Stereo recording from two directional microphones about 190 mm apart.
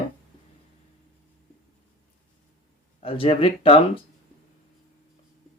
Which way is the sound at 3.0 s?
30° left (ahead or behind).